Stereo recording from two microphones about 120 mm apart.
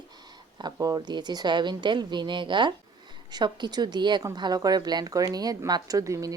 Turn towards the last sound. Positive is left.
turn(degrees=-30)  # may be behind; listen again after turning